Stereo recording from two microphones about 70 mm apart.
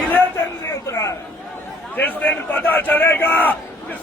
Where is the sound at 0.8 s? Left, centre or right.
Left.